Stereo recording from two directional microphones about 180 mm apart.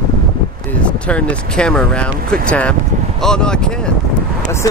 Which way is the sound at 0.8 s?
5° left (ahead or behind).